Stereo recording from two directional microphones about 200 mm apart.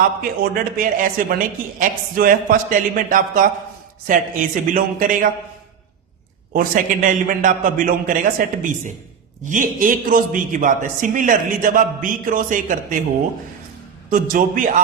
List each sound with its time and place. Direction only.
0.2 s a man's voice: 45° right (ahead or behind)
6.5 s a man's voice: 45° right (ahead or behind)
14.1 s a man's voice: 40° right (ahead or behind)